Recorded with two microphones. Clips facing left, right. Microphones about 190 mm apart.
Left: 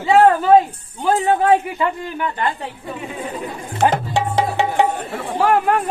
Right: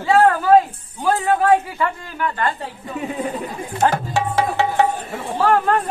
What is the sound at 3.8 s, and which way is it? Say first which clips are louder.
Music: left 1 dB; 20° left (ahead or behind).